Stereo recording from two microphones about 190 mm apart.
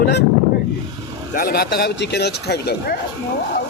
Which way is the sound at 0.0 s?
60° left (ahead or behind).